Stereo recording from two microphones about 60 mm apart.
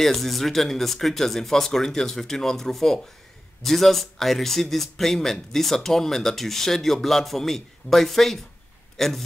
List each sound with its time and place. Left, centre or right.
0.0 s a man's voice: centre